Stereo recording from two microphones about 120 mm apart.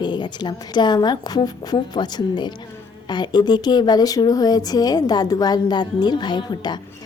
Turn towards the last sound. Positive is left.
turn(degrees=35)  # may be behind; listen again after turning